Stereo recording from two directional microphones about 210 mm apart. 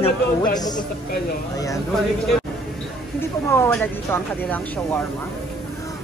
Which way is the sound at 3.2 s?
10° left (ahead or behind).